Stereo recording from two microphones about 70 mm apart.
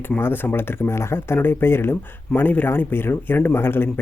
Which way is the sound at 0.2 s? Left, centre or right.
Left.